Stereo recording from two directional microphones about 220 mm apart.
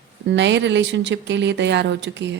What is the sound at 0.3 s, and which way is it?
Speech, 55° right (ahead or behind).